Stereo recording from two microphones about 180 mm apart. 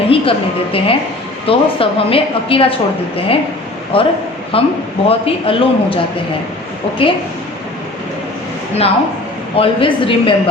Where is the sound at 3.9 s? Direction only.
30° left (ahead or behind).